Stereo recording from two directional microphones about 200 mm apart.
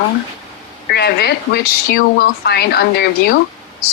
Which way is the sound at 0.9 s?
55° left (ahead or behind).